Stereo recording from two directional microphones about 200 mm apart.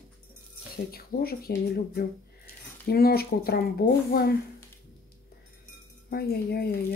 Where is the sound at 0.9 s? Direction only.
50° left (ahead or behind).